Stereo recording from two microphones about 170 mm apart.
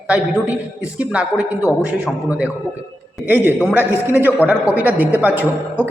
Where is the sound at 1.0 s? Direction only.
5° right (ahead or behind).